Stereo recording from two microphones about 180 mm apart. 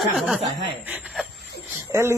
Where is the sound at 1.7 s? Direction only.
15° right (ahead or behind).